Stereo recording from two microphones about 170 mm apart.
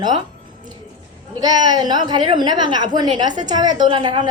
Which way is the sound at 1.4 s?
25° right (ahead or behind).